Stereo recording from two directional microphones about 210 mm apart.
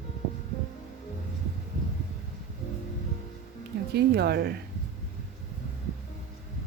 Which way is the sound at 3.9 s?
50° right (ahead or behind).